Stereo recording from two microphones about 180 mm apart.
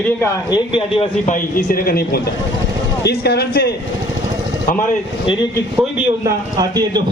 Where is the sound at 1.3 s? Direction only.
50° left (ahead or behind).